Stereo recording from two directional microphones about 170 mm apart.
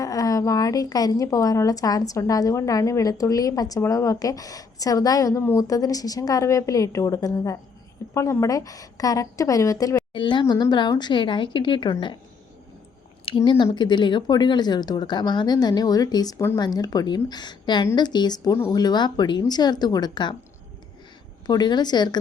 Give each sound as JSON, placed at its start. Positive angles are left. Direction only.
{"t": 0.0, "sound": "a woman's voice", "side_deg": 20}
{"t": 13.2, "sound": "a woman's voice", "side_deg": 30}
{"t": 21.4, "sound": "a woman's voice", "side_deg": 25}